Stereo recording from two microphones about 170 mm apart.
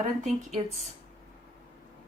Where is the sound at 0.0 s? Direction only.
45° right (ahead or behind).